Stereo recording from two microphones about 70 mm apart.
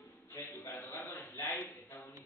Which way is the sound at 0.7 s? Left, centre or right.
Left.